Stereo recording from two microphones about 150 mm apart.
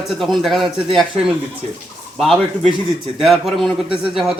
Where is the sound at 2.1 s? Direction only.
Centre (ahead or behind).